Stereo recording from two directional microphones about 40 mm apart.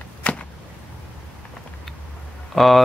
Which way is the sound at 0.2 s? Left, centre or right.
Left.